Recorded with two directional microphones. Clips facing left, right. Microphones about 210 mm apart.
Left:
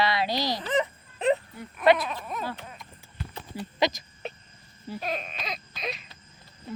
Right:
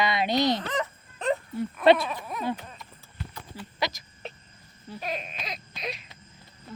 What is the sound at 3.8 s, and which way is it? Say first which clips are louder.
Speech: left 5 dB; 20° left (ahead or behind).